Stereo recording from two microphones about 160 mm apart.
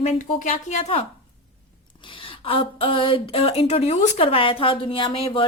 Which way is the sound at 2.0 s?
35° left (ahead or behind).